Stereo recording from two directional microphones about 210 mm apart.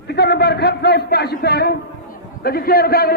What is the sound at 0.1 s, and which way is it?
A man's voice, 50° left (ahead or behind).